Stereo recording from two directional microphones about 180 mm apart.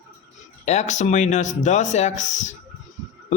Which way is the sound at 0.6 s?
40° left (ahead or behind).